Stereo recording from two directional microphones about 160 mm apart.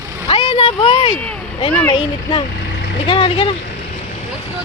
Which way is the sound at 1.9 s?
35° left (ahead or behind).